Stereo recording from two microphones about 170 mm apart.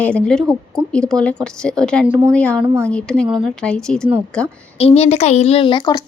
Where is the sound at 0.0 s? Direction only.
5° left (ahead or behind).